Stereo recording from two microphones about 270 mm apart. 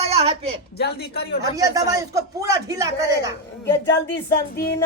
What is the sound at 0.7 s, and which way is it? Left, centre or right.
Speech, left.